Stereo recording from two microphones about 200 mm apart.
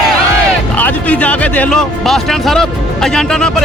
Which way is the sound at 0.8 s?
10° left (ahead or behind).